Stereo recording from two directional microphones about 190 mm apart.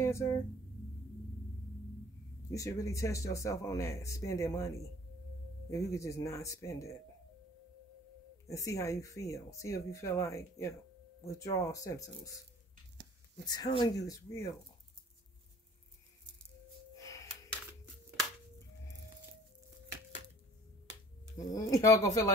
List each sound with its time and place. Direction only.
0.0 s speech: 15° left (ahead or behind)
2.5 s speech: 15° left (ahead or behind)
8.5 s speech: 15° left (ahead or behind)
13.5 s speech: 25° left (ahead or behind)
21.5 s speech: 15° left (ahead or behind)